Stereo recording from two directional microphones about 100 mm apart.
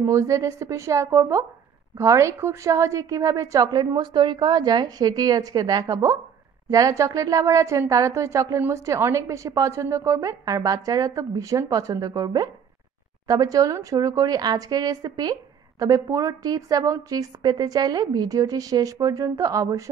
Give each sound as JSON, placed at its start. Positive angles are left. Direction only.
{"t": 0.0, "sound": "a woman's voice", "side_deg": -30}